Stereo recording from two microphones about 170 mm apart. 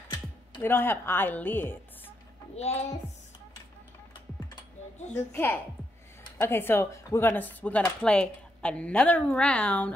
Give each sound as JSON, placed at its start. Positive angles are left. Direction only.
{"t": 0.6, "sound": "speech", "side_deg": 10}
{"t": 2.5, "sound": "speech", "side_deg": 40}
{"t": 5.1, "sound": "speech", "side_deg": 10}